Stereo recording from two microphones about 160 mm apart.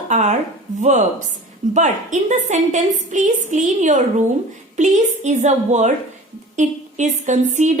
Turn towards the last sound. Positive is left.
turn(degrees=-50)  # may be behind; listen again after turning